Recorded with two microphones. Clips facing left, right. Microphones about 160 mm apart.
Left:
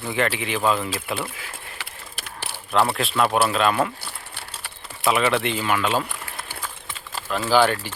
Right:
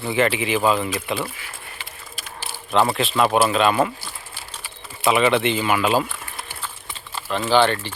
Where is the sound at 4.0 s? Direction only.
70° left (ahead or behind).